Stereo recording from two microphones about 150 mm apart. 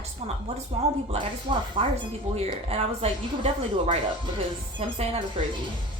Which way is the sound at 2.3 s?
45° right (ahead or behind).